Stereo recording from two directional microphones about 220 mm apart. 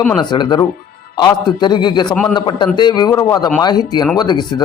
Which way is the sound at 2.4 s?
20° left (ahead or behind).